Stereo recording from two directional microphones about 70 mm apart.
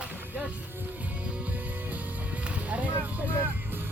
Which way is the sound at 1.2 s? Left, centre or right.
Centre.